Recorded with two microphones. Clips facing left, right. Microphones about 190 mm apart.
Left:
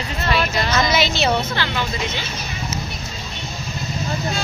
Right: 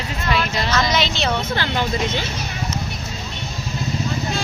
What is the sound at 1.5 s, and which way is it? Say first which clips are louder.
Speech: right 2 dB; 40° right (ahead or behind).